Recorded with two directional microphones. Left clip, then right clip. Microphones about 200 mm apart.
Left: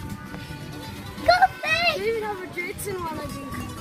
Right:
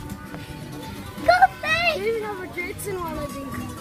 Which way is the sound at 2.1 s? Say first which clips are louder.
Right 1 dB; 45° left (ahead or behind).